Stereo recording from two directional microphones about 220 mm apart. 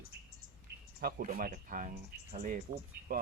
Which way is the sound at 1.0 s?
40° right (ahead or behind).